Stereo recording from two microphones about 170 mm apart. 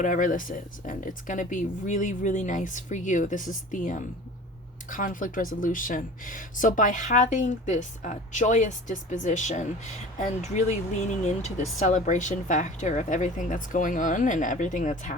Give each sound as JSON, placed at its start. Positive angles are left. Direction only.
{"t": 0.0, "sound": "speech", "side_deg": 50}